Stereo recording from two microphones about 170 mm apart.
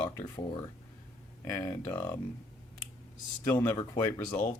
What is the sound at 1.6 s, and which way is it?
Speech, 15° left (ahead or behind).